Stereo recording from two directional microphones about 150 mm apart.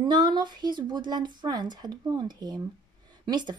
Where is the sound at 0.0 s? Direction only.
30° right (ahead or behind).